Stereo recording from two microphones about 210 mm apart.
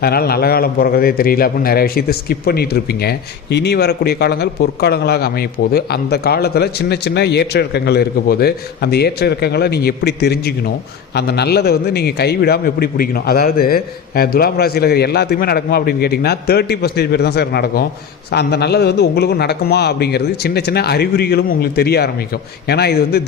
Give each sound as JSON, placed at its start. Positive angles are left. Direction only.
{"t": 0.0, "sound": "a man's voice", "side_deg": 45}